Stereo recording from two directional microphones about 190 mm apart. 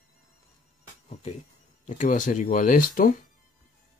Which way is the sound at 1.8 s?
40° left (ahead or behind).